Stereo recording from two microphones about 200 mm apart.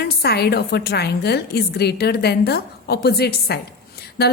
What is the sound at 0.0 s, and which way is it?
A woman's voice, 55° left (ahead or behind).